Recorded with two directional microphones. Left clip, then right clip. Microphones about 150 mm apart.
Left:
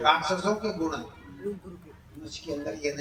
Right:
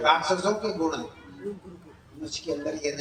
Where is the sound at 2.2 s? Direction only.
20° right (ahead or behind).